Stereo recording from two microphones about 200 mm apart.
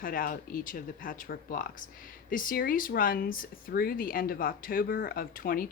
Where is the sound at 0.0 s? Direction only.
45° left (ahead or behind).